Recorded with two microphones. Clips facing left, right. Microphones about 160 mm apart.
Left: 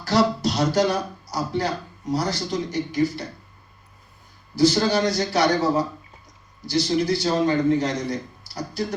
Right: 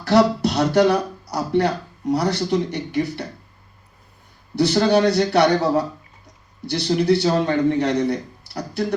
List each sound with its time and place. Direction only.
0.0 s speech: 65° right (ahead or behind)
4.5 s a man's voice: 65° right (ahead or behind)